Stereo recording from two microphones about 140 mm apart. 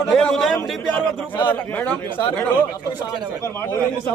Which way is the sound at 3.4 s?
15° left (ahead or behind).